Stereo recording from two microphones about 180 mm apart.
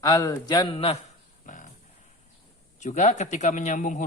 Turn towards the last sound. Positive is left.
turn(degrees=40)  # may be behind; listen again after turning